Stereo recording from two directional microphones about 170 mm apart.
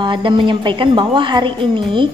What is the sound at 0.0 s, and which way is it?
A woman's voice, 30° right (ahead or behind).